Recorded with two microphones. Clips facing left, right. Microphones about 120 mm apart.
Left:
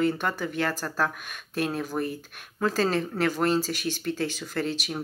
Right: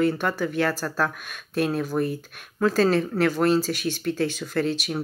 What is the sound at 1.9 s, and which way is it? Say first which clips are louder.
Speech: right 5 dB; 5° left (ahead or behind).